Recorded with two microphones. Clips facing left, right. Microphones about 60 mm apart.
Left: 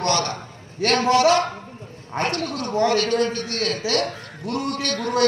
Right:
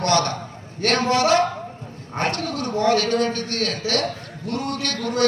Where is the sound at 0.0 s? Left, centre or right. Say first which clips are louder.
Right 2 dB; right.